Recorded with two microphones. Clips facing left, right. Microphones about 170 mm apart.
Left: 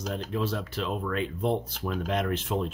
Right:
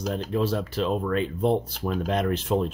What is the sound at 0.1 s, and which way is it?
Speech, 35° right (ahead or behind).